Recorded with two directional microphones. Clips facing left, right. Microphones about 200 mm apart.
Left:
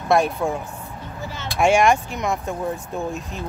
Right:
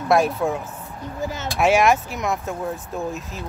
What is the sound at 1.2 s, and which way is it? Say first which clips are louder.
Speech: right 6 dB; 45° right (ahead or behind).